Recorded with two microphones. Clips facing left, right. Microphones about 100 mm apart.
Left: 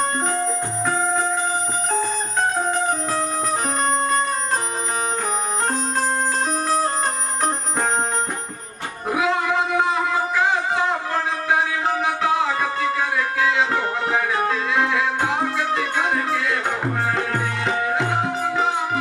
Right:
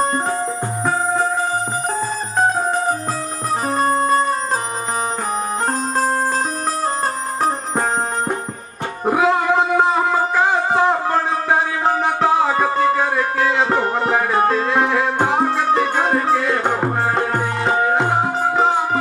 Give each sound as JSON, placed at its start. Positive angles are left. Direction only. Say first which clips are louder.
{"t": 3.7, "sound": "music", "louder": "right 7 dB", "side_deg": -35}
{"t": 9.0, "sound": "music", "louder": "right 5 dB", "side_deg": -40}